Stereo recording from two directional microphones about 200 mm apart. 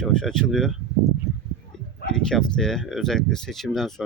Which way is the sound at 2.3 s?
5° left (ahead or behind).